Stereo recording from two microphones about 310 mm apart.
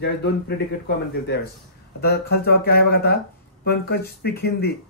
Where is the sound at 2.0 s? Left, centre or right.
Left.